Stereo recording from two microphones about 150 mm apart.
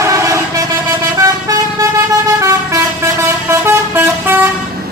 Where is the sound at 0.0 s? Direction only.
20° right (ahead or behind).